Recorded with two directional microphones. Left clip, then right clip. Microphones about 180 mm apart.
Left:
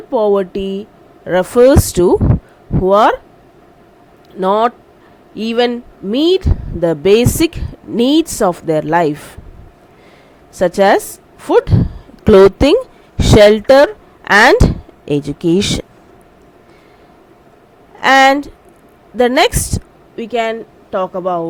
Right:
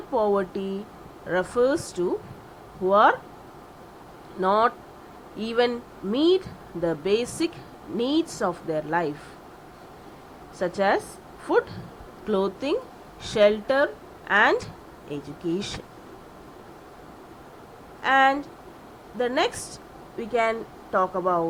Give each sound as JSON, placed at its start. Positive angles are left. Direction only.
{"t": 0.1, "sound": "speech", "side_deg": 50}
{"t": 4.4, "sound": "speech", "side_deg": 55}
{"t": 10.6, "sound": "a woman's voice", "side_deg": 60}
{"t": 18.0, "sound": "speech", "side_deg": 60}
{"t": 20.1, "sound": "speech", "side_deg": 45}